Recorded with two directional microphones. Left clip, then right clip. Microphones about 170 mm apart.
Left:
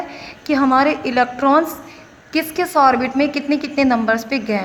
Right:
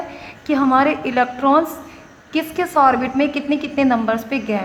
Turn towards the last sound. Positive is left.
turn(degrees=30)  # may be behind; listen again after turning